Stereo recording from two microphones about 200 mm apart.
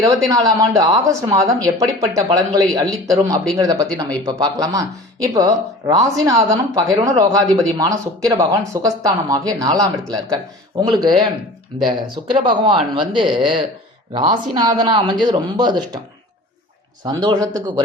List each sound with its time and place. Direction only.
0.3 s speech: 15° right (ahead or behind)
17.0 s speech: 20° right (ahead or behind)